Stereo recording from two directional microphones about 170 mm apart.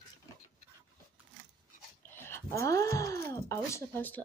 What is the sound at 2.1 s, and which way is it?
Speech, 15° left (ahead or behind).